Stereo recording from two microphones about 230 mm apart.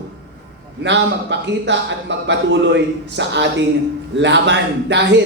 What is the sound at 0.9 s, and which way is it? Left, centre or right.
A man's voice, right.